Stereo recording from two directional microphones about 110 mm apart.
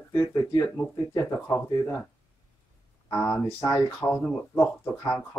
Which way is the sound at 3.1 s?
25° left (ahead or behind).